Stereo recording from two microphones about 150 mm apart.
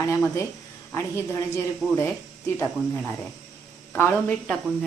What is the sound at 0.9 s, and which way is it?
Speech, 20° left (ahead or behind).